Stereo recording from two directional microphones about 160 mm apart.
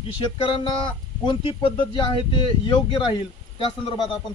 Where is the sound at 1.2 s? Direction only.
30° left (ahead or behind).